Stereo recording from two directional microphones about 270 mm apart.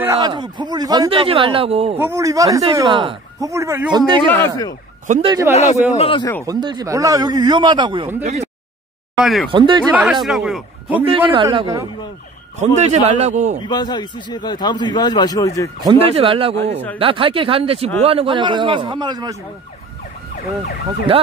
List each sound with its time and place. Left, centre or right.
0.0 s speech: centre
2.0 s speech: centre
4.3 s speech: centre
5.0 s speech: right
5.5 s a man's voice: left
6.4 s speech: centre
9.2 s a man's voice: centre
9.5 s speech: centre
10.2 s a man's voice: centre
11.1 s speech: centre
12.5 s speech: right
13.7 s speech: centre
15.8 s speech: centre